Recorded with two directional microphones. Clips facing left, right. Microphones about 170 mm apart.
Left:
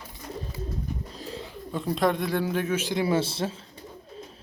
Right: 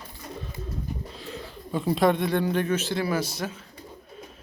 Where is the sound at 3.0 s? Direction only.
25° left (ahead or behind).